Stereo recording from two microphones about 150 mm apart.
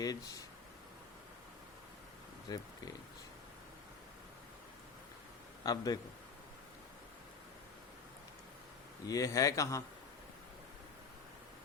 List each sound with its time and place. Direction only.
0.0 s speech: 25° left (ahead or behind)
2.5 s speech: 30° left (ahead or behind)
5.6 s speech: 25° left (ahead or behind)
9.0 s speech: 20° left (ahead or behind)